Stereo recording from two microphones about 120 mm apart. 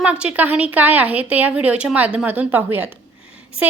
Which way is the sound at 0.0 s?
10° right (ahead or behind).